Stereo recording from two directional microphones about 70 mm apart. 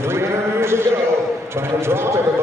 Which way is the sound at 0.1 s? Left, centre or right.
Right.